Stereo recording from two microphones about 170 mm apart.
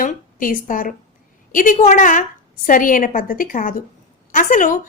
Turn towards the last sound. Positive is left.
turn(degrees=50)  # may be behind; listen again after turning